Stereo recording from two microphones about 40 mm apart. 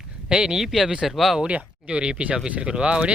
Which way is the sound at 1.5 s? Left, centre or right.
Right.